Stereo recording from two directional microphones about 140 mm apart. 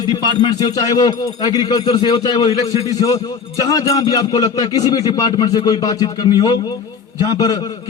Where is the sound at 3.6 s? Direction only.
25° left (ahead or behind).